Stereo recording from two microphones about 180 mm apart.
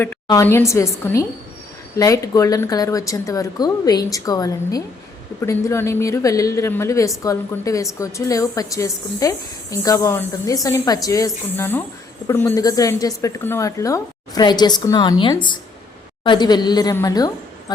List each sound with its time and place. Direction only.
0.4 s a woman's voice: 15° left (ahead or behind)